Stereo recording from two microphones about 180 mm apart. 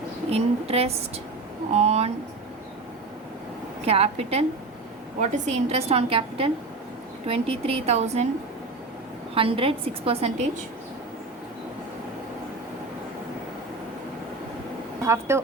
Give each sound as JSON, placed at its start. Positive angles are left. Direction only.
{"t": 0.3, "sound": "a woman's voice", "side_deg": -35}
{"t": 3.8, "sound": "a woman's voice", "side_deg": -35}
{"t": 9.3, "sound": "a woman's voice", "side_deg": -30}
{"t": 15.0, "sound": "speech", "side_deg": -15}